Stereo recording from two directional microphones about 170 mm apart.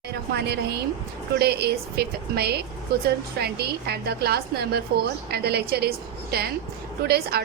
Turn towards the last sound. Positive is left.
turn(degrees=-70)  # may be behind; listen again after turning